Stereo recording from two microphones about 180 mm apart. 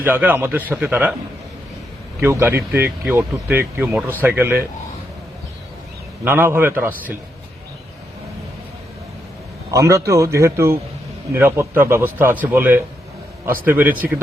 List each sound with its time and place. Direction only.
0.0 s speech: 10° right (ahead or behind)
2.2 s speech: 10° right (ahead or behind)
6.2 s speech: 10° right (ahead or behind)
9.7 s speech: 15° right (ahead or behind)